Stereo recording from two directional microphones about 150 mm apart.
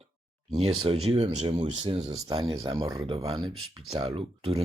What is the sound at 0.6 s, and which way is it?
Speech, 40° right (ahead or behind).